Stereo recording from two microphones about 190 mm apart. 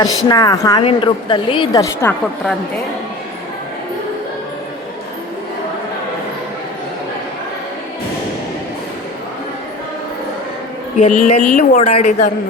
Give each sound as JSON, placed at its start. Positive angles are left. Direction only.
{"t": 0.0, "sound": "a woman's voice", "side_deg": 20}
{"t": 11.0, "sound": "a woman's voice", "side_deg": 40}